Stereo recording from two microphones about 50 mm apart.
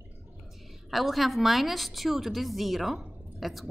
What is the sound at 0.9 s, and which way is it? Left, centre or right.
Speech, centre.